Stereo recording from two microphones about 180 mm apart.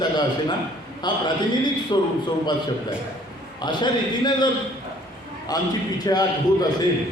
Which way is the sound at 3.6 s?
25° left (ahead or behind).